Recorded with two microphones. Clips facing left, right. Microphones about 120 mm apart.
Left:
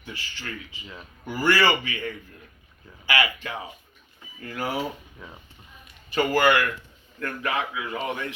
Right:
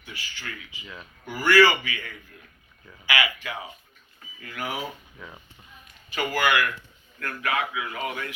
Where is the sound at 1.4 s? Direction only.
30° left (ahead or behind).